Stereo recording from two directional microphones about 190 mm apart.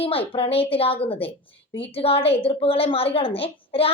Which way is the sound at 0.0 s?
30° left (ahead or behind).